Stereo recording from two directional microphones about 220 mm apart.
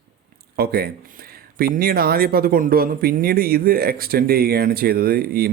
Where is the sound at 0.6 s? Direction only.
45° right (ahead or behind).